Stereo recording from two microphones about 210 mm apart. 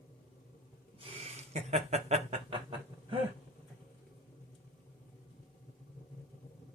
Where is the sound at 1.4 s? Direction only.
30° right (ahead or behind).